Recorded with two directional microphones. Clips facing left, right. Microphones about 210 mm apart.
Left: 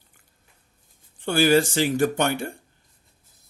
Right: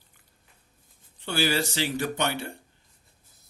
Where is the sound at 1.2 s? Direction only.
50° left (ahead or behind).